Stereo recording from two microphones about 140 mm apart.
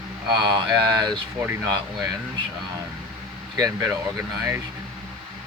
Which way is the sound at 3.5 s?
25° right (ahead or behind).